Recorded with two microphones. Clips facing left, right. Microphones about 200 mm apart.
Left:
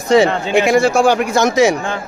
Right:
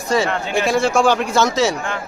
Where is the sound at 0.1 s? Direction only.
20° left (ahead or behind).